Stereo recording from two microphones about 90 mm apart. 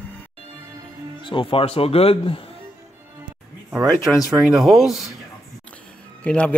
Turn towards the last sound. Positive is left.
turn(degrees=15)  # may be behind; listen again after turning